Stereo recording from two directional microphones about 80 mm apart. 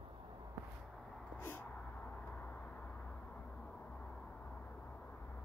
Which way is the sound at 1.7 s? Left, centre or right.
Centre.